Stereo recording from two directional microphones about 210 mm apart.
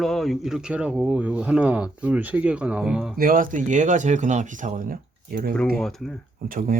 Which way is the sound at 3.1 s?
40° right (ahead or behind).